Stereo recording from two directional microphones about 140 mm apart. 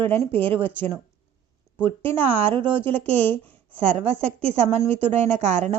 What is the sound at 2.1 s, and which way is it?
Speech, 45° right (ahead or behind).